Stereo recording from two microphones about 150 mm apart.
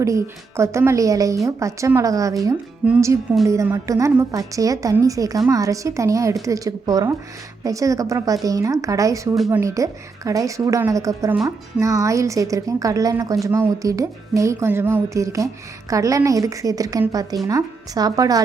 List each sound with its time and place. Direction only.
0.0 s speech: 20° right (ahead or behind)
3.4 s speech: 20° right (ahead or behind)